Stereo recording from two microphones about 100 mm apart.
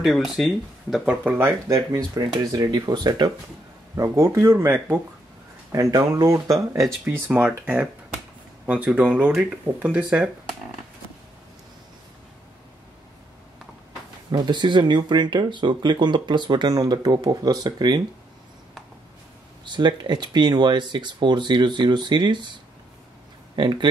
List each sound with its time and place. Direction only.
0.0 s speech: centre (ahead or behind)
1.2 s speech: 15° right (ahead or behind)
2.1 s speech: 40° right (ahead or behind)
3.9 s speech: 30° right (ahead or behind)
5.7 s speech: 35° right (ahead or behind)
7.2 s speech: 15° right (ahead or behind)
14.3 s speech: 50° right (ahead or behind)
19.6 s speech: 50° right (ahead or behind)
23.5 s speech: 50° right (ahead or behind)